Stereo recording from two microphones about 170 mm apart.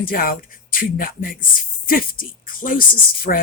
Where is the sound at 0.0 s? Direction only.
60° left (ahead or behind).